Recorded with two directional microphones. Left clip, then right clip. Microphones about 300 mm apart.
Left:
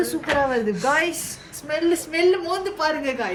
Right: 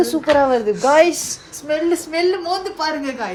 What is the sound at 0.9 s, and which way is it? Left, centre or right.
Speech, right.